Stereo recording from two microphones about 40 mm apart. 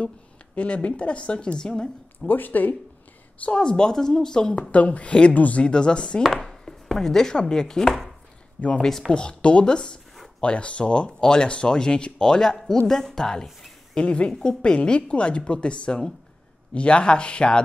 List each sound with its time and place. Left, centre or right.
0.6 s speech: left
2.2 s speech: left
3.4 s speech: left
4.6 s a woman's voice: left
5.7 s speech: left
6.3 s chopping: centre
8.5 s speech: left; by 13.5 s centre
13.9 s speech: left